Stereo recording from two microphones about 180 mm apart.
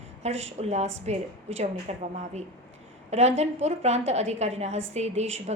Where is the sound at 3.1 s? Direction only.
35° right (ahead or behind).